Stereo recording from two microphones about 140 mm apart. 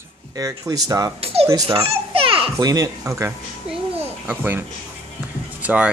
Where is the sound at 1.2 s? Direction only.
45° right (ahead or behind).